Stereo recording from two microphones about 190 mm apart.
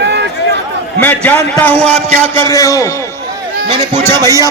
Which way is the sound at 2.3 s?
15° left (ahead or behind).